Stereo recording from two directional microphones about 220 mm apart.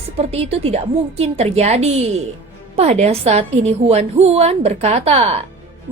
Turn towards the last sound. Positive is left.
turn(degrees=-30)  # may be behind; listen again after turning